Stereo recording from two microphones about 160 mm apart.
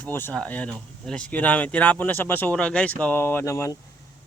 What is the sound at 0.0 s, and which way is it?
Speech, 15° left (ahead or behind).